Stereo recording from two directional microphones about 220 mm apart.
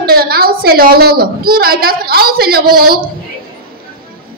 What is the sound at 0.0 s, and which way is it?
A woman's voice, 45° right (ahead or behind).